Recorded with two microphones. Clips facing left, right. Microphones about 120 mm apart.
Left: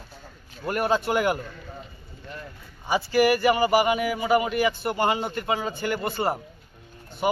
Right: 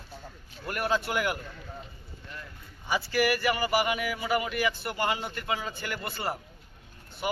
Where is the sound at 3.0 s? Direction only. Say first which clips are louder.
Left 7 dB; 20° left (ahead or behind).